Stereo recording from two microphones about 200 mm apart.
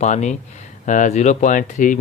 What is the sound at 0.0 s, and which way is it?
Speech, 35° left (ahead or behind).